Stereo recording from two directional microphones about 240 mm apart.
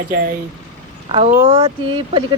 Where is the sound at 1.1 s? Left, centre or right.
Right.